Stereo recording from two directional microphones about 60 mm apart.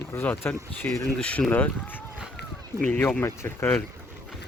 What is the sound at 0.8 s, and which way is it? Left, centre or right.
Speech, left.